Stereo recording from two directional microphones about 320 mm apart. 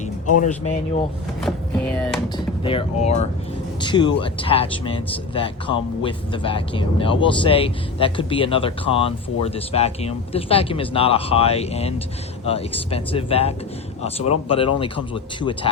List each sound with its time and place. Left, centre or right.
1.4 s speech: centre
2.6 s speech: centre